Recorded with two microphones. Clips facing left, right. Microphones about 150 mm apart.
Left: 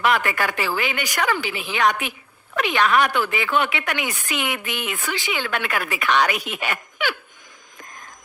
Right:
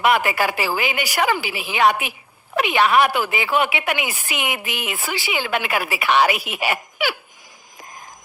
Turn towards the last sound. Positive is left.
turn(degrees=-10)  # may be behind; listen again after turning